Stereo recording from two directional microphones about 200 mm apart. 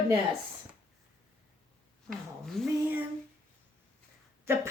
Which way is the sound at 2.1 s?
Centre (ahead or behind).